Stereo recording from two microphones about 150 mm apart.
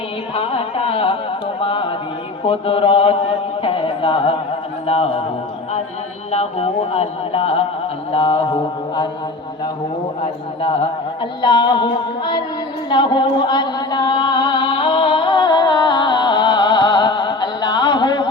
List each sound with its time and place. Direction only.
0.3 s carnatic music: 40° left (ahead or behind)
1.6 s a sound: 35° left (ahead or behind)
2.4 s chant: 35° left (ahead or behind)
4.9 s mantra: 40° left (ahead or behind)
6.3 s speech: 45° left (ahead or behind)
8.1 s mantra: 40° left (ahead or behind)
10.6 s music: 40° left (ahead or behind)